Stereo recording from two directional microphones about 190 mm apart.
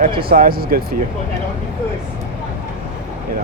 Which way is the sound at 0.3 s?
50° right (ahead or behind).